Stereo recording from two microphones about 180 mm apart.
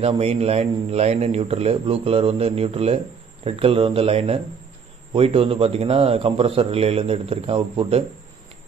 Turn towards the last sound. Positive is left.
turn(degrees=-30)  # may be behind; listen again after turning